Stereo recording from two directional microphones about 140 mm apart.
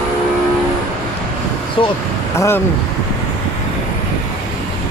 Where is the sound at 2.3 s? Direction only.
20° left (ahead or behind).